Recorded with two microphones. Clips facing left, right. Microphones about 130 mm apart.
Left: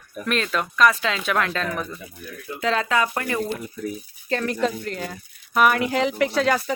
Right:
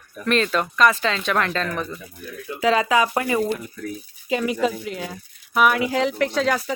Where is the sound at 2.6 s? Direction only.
5° right (ahead or behind).